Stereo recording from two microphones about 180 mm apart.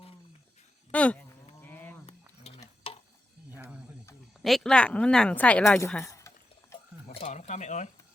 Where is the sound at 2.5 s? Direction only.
35° left (ahead or behind).